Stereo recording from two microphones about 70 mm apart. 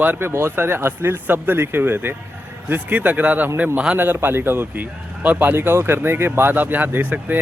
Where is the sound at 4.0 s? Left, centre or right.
Right.